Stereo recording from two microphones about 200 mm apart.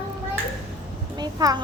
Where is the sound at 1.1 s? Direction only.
20° right (ahead or behind).